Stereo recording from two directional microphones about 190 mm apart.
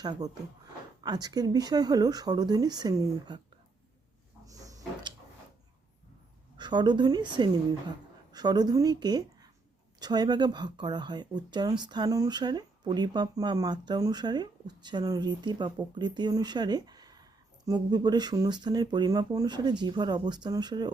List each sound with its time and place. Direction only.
0.0 s speech: 20° right (ahead or behind)
4.4 s a sound: 20° right (ahead or behind)
6.6 s a woman's voice: 25° right (ahead or behind)